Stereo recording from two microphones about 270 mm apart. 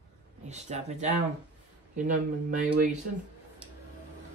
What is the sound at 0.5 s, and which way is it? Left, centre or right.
Speech, right.